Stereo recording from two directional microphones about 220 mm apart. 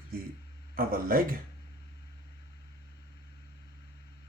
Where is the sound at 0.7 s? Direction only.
40° right (ahead or behind).